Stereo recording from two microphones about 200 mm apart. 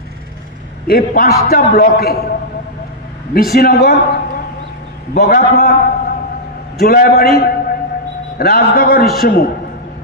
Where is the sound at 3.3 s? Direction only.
50° left (ahead or behind).